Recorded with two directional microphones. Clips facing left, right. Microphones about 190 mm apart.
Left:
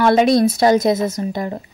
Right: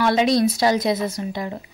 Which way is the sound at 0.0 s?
55° left (ahead or behind).